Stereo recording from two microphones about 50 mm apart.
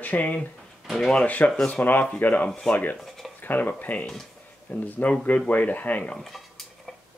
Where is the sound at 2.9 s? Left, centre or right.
Centre.